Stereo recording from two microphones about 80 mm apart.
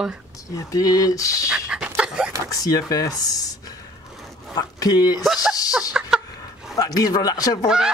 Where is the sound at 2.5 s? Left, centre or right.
Left.